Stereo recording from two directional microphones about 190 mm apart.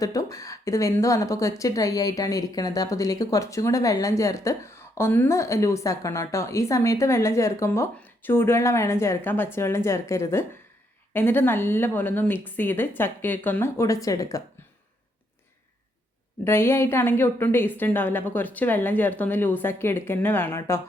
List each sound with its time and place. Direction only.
0.0 s a woman's voice: 15° left (ahead or behind)
16.4 s a woman's voice: 15° left (ahead or behind)